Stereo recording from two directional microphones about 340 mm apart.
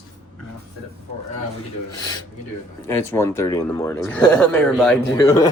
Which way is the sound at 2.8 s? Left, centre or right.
Centre.